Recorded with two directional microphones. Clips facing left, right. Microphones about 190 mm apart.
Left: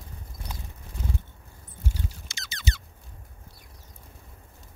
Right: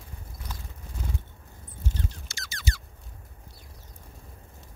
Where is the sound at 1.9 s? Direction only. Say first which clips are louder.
Right 1 dB; 15° left (ahead or behind).